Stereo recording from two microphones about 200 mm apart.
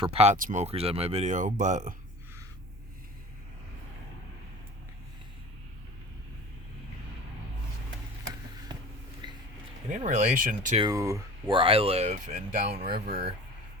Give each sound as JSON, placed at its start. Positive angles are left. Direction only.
{"t": 0.0, "sound": "speech", "side_deg": -30}
{"t": 9.2, "sound": "a sound", "side_deg": -20}
{"t": 9.9, "sound": "speech", "side_deg": -40}
{"t": 10.8, "sound": "speech", "side_deg": -15}
{"t": 12.7, "sound": "speech", "side_deg": -30}